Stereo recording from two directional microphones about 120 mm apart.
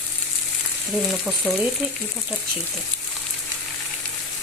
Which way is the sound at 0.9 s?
5° right (ahead or behind).